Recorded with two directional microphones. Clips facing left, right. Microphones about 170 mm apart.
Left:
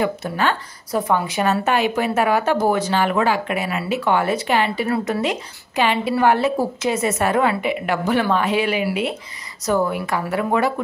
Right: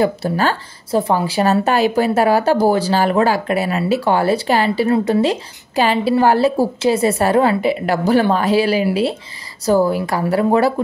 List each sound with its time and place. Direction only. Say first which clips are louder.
0.0 s speech: right 4 dB; 35° right (ahead or behind)